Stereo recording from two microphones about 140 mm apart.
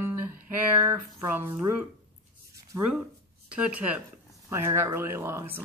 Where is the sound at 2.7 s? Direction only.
20° right (ahead or behind).